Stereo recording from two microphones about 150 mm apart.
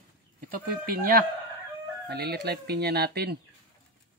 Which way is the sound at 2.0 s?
90° right.